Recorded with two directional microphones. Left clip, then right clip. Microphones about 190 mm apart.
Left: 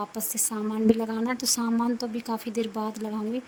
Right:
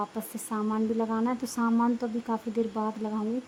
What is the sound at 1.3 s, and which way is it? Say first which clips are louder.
Speech: left 4 dB; 50° left (ahead or behind).